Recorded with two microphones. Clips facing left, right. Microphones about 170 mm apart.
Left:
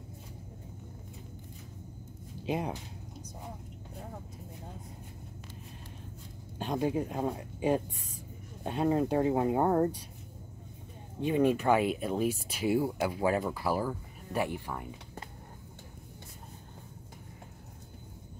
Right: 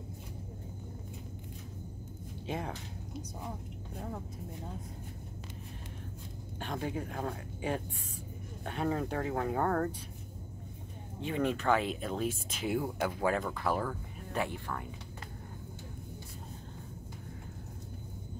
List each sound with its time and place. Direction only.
2.4 s speech: 15° left (ahead or behind)
6.6 s speech: 20° left (ahead or behind)
11.2 s speech: 15° left (ahead or behind)